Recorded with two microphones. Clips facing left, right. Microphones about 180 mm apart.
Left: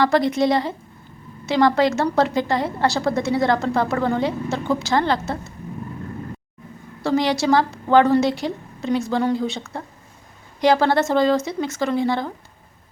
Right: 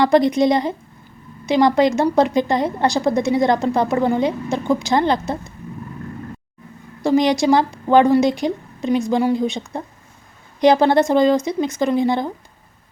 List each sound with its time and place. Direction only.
0.0 s a woman's voice: 20° right (ahead or behind)
7.0 s a woman's voice: 15° right (ahead or behind)